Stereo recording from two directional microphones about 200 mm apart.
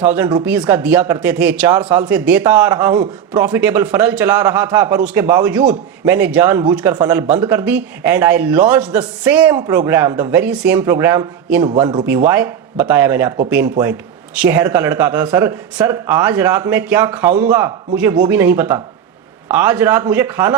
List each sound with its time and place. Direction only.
0.0 s a man's voice: 10° right (ahead or behind)
11.8 s speech: 20° right (ahead or behind)
12.0 s a man's voice: 10° right (ahead or behind)